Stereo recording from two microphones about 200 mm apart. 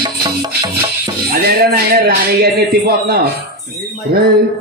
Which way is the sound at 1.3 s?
50° right (ahead or behind).